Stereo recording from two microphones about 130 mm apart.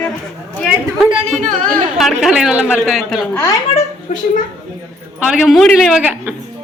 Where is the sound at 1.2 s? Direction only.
75° right (ahead or behind).